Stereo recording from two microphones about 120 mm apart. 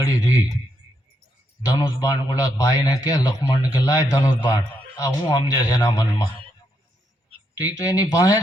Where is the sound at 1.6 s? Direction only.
30° left (ahead or behind).